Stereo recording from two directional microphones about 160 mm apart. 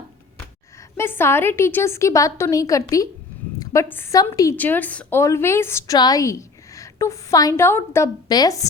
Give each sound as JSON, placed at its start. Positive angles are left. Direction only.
{"t": 0.9, "sound": "a woman's voice", "side_deg": 15}